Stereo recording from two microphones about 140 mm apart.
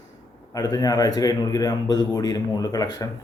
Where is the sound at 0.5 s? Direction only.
25° left (ahead or behind).